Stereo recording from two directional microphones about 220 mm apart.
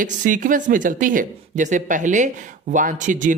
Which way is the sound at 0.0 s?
35° right (ahead or behind).